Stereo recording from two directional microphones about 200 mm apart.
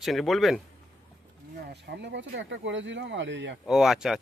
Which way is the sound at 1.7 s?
60° right (ahead or behind).